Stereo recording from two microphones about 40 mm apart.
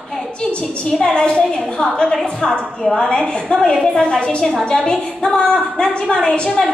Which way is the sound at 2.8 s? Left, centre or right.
Centre.